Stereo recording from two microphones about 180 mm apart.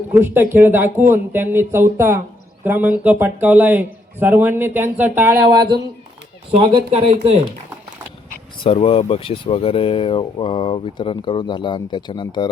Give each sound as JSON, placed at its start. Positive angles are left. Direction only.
{"t": 0.1, "sound": "speech", "side_deg": -10}
{"t": 6.5, "sound": "speech", "side_deg": -30}
{"t": 8.6, "sound": "speech", "side_deg": 30}